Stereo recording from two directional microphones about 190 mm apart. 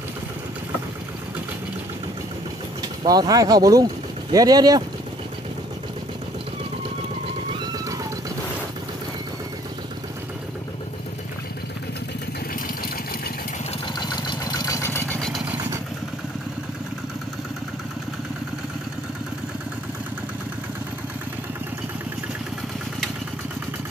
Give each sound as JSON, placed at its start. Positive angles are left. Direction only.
{"t": 3.0, "sound": "speech", "side_deg": -20}
{"t": 13.9, "sound": "vehicle", "side_deg": 20}
{"t": 15.5, "sound": "vehicle", "side_deg": -10}